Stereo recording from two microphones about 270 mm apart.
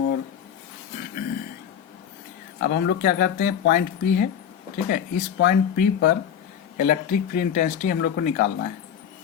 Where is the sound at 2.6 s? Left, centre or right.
Left.